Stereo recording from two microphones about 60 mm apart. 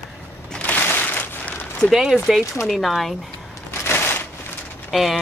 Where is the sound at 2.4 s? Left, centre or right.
Left.